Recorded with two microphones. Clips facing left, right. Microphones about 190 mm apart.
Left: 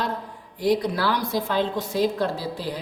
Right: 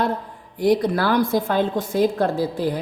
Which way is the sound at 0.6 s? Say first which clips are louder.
Right 4 dB; 50° right (ahead or behind).